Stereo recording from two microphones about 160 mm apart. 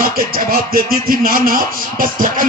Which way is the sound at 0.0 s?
65° right (ahead or behind).